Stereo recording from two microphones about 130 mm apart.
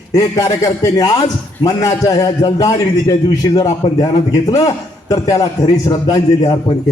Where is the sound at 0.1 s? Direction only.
25° left (ahead or behind).